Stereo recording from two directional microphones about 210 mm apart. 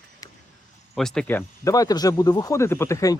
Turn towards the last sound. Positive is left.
turn(degrees=15)  # may be behind; listen again after turning